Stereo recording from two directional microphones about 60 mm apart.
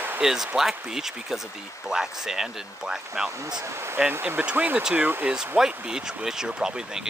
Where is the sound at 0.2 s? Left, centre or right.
Centre.